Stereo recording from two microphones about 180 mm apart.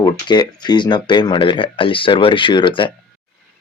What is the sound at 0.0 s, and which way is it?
Speech, 25° left (ahead or behind).